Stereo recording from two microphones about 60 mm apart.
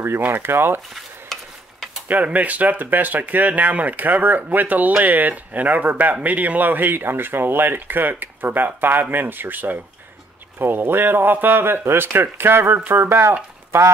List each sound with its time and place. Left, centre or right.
0.3 s speech: right
0.9 s stir: centre
2.0 s speech: right